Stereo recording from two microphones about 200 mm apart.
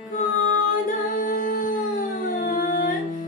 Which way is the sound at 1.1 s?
40° left (ahead or behind).